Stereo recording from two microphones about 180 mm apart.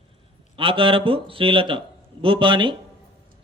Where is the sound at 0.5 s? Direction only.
30° right (ahead or behind).